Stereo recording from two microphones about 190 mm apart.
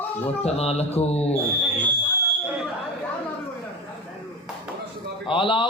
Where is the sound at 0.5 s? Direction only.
30° left (ahead or behind).